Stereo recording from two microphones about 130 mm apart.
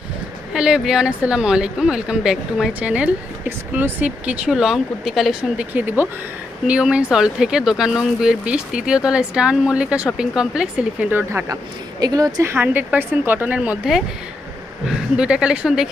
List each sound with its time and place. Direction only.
0.5 s speech: 5° right (ahead or behind)
11.1 s speech: 15° right (ahead or behind)
11.9 s speech: 30° right (ahead or behind); by 15.9 s 5° right (ahead or behind)